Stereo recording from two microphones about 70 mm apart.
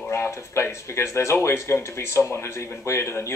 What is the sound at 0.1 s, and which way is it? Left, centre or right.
Speech, left.